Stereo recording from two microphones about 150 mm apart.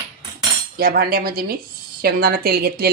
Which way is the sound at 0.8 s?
90° right.